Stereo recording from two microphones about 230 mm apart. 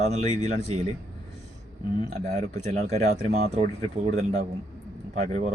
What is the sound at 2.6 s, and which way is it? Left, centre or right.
Speech, right.